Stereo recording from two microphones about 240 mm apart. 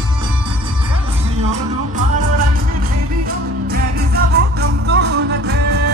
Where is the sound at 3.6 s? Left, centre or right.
Right.